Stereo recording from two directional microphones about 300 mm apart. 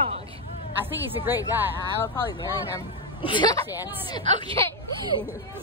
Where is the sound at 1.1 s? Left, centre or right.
Centre.